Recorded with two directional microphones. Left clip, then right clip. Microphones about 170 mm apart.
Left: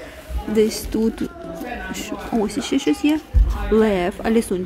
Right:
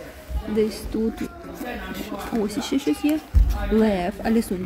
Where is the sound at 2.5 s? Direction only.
5° left (ahead or behind).